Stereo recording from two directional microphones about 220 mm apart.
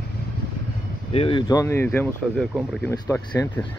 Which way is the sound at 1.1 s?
25° left (ahead or behind).